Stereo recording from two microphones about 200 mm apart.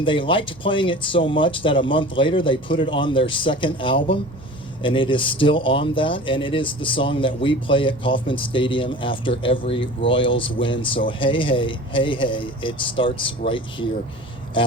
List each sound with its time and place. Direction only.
0.0 s speech: 25° left (ahead or behind)